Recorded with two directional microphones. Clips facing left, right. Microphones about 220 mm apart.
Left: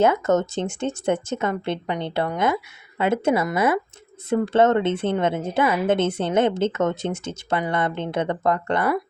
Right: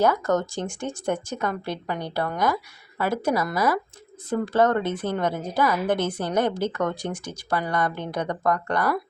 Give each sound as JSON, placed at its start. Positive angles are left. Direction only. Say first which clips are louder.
{"t": 0.0, "sound": "speech", "louder": "left 3 dB", "side_deg": 20}